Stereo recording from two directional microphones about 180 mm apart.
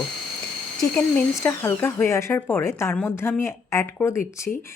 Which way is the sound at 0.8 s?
5° left (ahead or behind).